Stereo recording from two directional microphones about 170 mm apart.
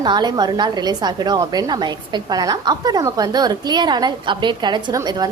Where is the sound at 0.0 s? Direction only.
25° right (ahead or behind).